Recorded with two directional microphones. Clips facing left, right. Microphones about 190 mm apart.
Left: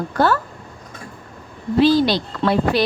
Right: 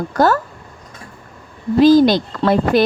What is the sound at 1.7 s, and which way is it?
A woman's voice, 45° right (ahead or behind).